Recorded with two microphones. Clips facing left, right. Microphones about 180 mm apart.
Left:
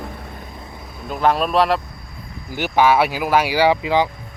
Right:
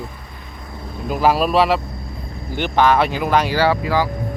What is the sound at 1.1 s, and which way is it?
Speech, 5° right (ahead or behind).